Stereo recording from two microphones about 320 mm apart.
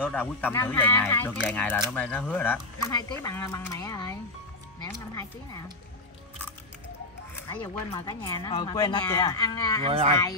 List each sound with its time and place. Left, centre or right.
0.0 s speech: centre
7.4 s speech: centre
9.8 s speech: centre